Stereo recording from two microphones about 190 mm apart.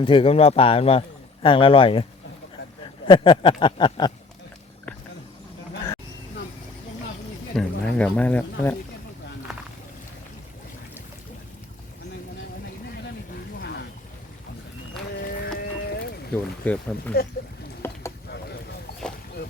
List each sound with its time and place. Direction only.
0.0 s speech: 30° left (ahead or behind)
7.5 s speech: 5° left (ahead or behind)
13.6 s wild animals: 60° left (ahead or behind)
15.2 s livestock: 55° left (ahead or behind)
16.3 s speech: 5° left (ahead or behind)
17.1 s speech: 55° left (ahead or behind)
17.8 s boat: 10° left (ahead or behind)